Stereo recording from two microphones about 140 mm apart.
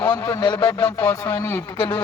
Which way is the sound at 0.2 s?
20° left (ahead or behind).